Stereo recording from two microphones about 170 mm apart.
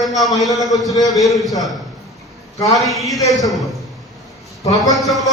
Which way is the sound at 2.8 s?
Centre (ahead or behind).